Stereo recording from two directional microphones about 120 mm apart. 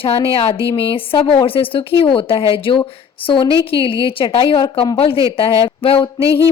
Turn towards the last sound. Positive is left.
turn(degrees=50)  # may be behind; listen again after turning